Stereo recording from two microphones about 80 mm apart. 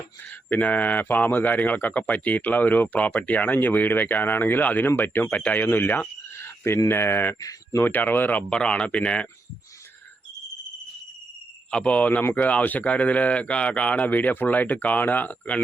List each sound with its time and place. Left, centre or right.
0.5 s speech: centre
5.6 s a sound: left
6.8 s speech: left; by 9.2 s centre
11.7 s speech: centre